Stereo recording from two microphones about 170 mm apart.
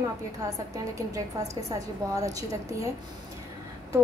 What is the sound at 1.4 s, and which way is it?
A woman's voice, 20° right (ahead or behind).